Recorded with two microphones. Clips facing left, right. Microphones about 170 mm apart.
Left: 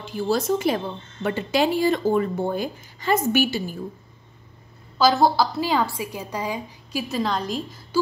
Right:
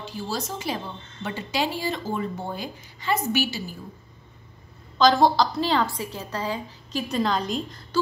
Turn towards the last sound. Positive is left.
turn(degrees=5)  # may be behind; listen again after turning